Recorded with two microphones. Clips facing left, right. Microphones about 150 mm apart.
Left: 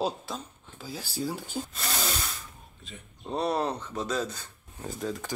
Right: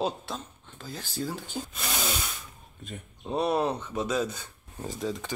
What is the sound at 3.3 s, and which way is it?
Speech, 5° right (ahead or behind).